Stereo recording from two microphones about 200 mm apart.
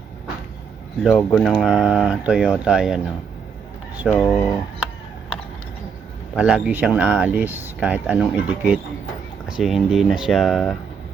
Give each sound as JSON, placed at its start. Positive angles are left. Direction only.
{"t": 1.0, "sound": "speech", "side_deg": 0}
{"t": 4.1, "sound": "speech", "side_deg": 5}
{"t": 6.3, "sound": "speech", "side_deg": -5}